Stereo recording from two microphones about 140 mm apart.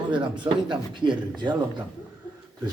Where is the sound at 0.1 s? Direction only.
35° right (ahead or behind).